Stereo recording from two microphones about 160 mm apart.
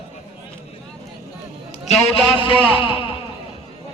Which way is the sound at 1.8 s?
45° left (ahead or behind).